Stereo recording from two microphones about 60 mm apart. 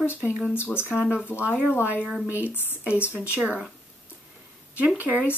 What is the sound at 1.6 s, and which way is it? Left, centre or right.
Speech, right.